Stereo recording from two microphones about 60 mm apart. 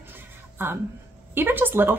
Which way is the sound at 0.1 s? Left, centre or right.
Right.